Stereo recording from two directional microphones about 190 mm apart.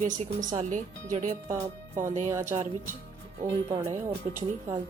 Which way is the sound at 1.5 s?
15° right (ahead or behind).